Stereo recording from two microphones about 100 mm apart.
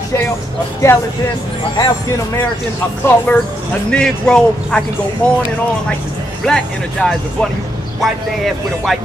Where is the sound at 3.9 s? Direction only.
10° left (ahead or behind).